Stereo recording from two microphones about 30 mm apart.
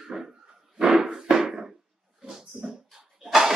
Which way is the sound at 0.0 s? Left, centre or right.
Centre.